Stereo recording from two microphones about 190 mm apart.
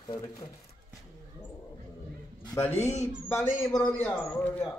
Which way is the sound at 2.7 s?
35° left (ahead or behind).